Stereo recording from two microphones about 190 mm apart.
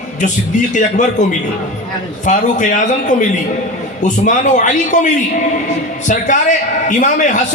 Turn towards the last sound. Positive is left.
turn(degrees=40)  # may be behind; listen again after turning